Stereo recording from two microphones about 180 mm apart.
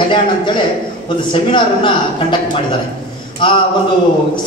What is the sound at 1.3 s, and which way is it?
Speech, 25° left (ahead or behind).